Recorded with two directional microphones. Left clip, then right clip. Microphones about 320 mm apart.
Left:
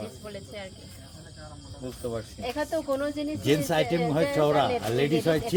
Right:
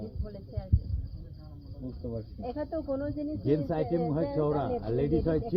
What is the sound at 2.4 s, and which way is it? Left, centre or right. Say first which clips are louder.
Speech: left 5 dB; left.